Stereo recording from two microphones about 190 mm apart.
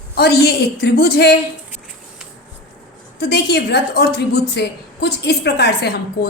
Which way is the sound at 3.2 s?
60° left (ahead or behind).